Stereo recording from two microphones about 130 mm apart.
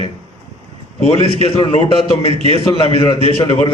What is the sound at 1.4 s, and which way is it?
A man's voice, 50° left (ahead or behind).